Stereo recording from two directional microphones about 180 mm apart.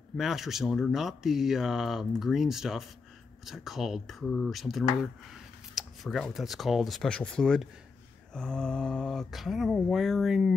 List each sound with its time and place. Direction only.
0.2 s speech: centre (ahead or behind)